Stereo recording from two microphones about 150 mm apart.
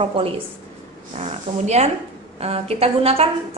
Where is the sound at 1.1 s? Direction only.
50° right (ahead or behind).